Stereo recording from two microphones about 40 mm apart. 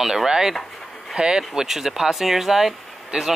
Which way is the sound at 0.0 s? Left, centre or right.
Centre.